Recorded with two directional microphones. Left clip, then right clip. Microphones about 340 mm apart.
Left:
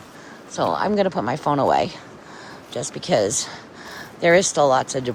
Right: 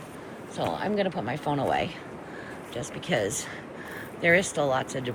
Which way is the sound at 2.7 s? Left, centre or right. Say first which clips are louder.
Left 8 dB; centre.